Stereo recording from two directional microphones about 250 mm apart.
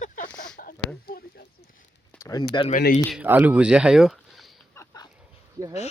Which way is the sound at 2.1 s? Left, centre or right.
Centre.